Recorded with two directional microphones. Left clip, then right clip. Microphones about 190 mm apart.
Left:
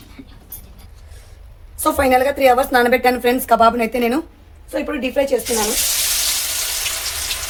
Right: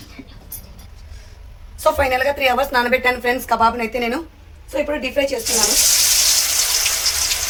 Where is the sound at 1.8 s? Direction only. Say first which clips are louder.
Left 2 dB; 65° left (ahead or behind).